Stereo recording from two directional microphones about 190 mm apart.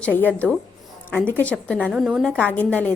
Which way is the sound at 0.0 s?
10° left (ahead or behind).